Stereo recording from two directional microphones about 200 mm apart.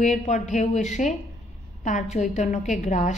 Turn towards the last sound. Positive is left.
turn(degrees=35)  # may be behind; listen again after turning